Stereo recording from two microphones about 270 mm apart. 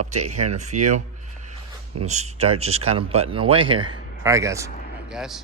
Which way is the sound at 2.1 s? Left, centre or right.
Right.